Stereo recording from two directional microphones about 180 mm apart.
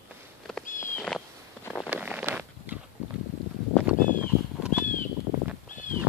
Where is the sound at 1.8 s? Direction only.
5° right (ahead or behind).